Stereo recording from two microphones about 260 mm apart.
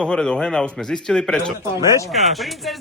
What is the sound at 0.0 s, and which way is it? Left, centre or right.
A man's voice, centre.